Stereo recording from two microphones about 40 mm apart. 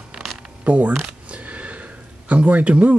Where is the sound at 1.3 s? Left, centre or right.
Right.